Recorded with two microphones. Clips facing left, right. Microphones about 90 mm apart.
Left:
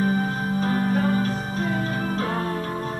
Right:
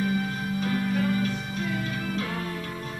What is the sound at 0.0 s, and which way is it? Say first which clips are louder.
Music: left 4 dB; 40° left (ahead or behind).